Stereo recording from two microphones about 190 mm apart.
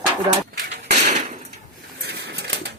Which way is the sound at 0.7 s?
35° right (ahead or behind).